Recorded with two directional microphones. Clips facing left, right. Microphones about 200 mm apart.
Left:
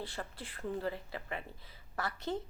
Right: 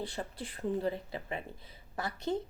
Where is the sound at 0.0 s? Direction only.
15° right (ahead or behind).